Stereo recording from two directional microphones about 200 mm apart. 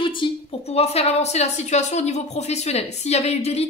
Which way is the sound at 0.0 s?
25° left (ahead or behind).